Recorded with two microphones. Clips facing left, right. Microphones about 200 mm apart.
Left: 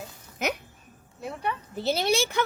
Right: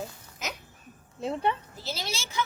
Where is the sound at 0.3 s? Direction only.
60° left (ahead or behind).